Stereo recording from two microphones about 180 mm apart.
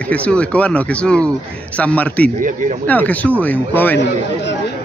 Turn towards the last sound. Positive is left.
turn(degrees=10)  # may be behind; listen again after turning